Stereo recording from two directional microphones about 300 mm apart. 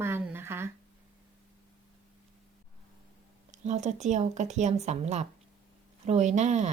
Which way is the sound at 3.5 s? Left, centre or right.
Right.